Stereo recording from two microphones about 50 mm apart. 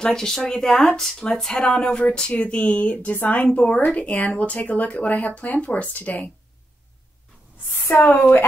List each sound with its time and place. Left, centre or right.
0.0 s speech: centre; by 3.4 s left
3.5 s speech: left
3.8 s speech: left
8.1 s speech: left